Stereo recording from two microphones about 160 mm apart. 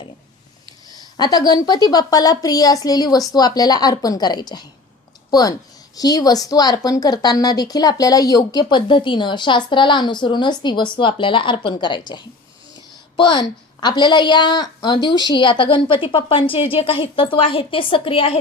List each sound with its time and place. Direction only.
0.9 s a woman's voice: 25° left (ahead or behind)